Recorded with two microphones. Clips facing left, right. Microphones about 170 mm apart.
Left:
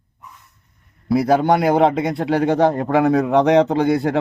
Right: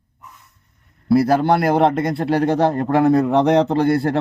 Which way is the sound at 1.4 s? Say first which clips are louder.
Left 1 dB; 15° left (ahead or behind).